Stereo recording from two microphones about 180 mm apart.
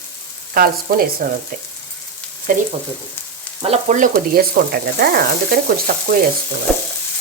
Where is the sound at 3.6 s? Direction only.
40° right (ahead or behind); by 5.6 s 60° right (ahead or behind).